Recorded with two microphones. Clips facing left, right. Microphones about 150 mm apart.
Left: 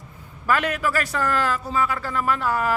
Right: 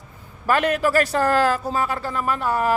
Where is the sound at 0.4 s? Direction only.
30° right (ahead or behind).